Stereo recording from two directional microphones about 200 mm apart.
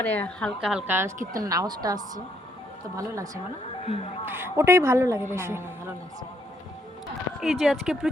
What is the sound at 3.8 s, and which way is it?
Speech, 30° left (ahead or behind).